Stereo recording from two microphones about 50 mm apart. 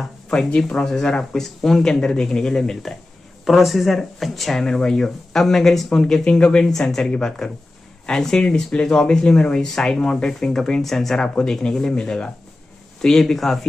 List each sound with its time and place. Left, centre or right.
0.5 s speech: left
6.6 s speech: centre
8.7 s speech: left; by 11.1 s centre
11.1 s speech: centre